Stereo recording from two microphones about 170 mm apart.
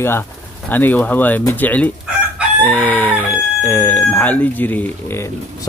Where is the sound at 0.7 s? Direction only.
10° left (ahead or behind).